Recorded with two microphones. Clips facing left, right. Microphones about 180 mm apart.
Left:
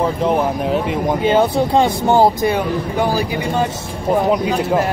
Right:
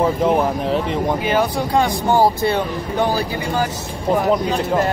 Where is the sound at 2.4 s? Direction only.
10° left (ahead or behind).